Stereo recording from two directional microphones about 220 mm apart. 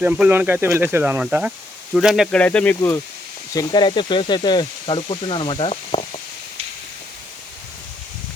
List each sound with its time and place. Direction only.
0.0 s speech: 5° right (ahead or behind); by 6.1 s 25° left (ahead or behind)